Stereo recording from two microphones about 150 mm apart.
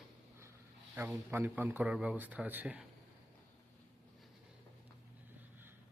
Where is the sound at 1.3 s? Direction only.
15° right (ahead or behind).